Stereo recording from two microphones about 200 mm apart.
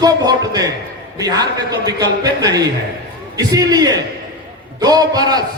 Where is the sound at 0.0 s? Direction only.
20° right (ahead or behind).